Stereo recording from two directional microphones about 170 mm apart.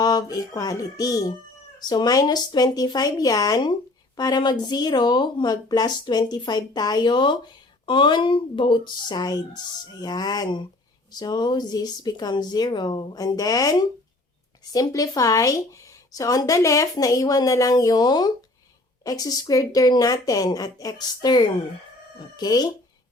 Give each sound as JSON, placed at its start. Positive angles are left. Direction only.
{"t": 0.0, "sound": "speech", "side_deg": 25}